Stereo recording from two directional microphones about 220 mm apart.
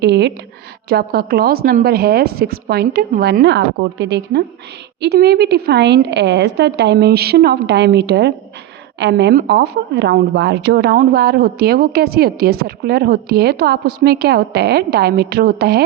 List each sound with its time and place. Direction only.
0.0 s speech: 50° right (ahead or behind)